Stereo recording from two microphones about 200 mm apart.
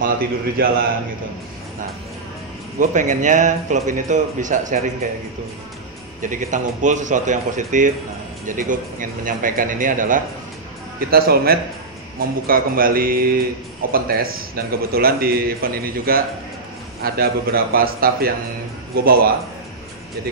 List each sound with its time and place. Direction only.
0.0 s speech: 50° right (ahead or behind)
2.8 s speech: 40° right (ahead or behind)
6.2 s speech: 40° right (ahead or behind)